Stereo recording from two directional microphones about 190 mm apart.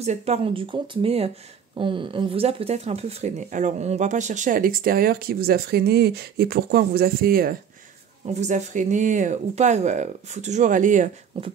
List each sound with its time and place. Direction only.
0.0 s speech: 35° right (ahead or behind); by 7.5 s 50° right (ahead or behind)
8.3 s speech: 40° right (ahead or behind)
11.3 s speech: 30° right (ahead or behind)